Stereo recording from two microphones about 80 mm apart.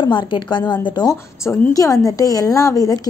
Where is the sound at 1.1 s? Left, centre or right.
Left.